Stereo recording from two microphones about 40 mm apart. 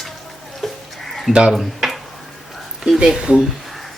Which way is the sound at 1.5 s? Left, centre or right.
Centre.